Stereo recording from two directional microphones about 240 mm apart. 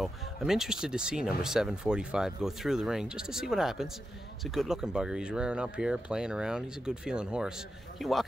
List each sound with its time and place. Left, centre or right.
0.0 s speech: centre